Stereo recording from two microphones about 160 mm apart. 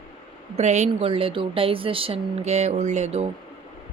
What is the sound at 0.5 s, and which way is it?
Speech, 45° right (ahead or behind).